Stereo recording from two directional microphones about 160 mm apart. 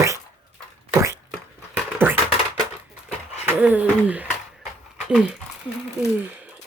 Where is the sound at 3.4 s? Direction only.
10° right (ahead or behind).